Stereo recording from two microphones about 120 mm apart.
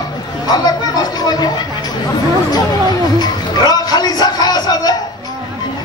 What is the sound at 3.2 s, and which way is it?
A man's voice, 35° left (ahead or behind).